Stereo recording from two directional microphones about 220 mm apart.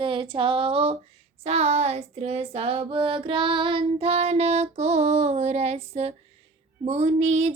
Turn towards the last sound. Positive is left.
turn(degrees=-30)  # may be behind; listen again after turning